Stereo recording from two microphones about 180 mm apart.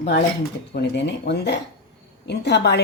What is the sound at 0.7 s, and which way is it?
Speech, 70° left (ahead or behind).